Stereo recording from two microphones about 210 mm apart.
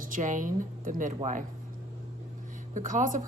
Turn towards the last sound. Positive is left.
turn(degrees=-40)  # may be behind; listen again after turning